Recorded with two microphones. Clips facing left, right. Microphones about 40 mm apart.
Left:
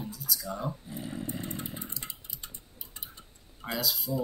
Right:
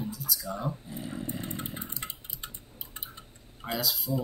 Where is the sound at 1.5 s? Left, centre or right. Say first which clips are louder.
Right 1 dB; right.